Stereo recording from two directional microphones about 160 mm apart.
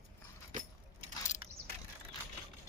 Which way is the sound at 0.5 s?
55° right (ahead or behind).